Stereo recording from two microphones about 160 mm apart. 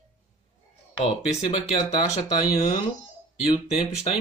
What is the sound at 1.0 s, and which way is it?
Speech, 45° left (ahead or behind).